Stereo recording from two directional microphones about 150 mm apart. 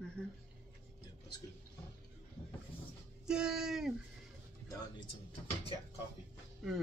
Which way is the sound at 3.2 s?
5° right (ahead or behind).